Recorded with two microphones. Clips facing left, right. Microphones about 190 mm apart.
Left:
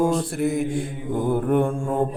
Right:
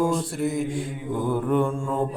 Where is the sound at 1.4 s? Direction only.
55° left (ahead or behind).